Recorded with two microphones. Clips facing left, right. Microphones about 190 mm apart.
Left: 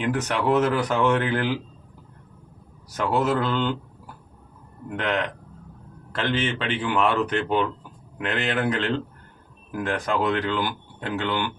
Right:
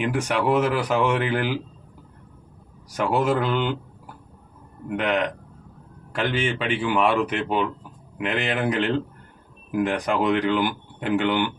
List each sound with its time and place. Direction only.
0.0 s speech: 10° right (ahead or behind)
2.9 s speech: 15° right (ahead or behind)
4.9 s speech: 10° right (ahead or behind)